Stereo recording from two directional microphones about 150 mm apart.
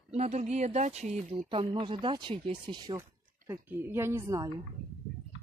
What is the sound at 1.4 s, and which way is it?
Speech, 35° right (ahead or behind).